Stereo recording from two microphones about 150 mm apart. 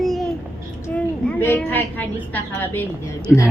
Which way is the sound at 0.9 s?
10° left (ahead or behind).